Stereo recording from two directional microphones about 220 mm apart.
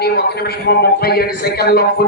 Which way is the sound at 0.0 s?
45° left (ahead or behind).